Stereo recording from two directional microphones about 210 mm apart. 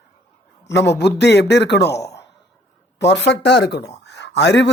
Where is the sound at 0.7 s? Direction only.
55° left (ahead or behind).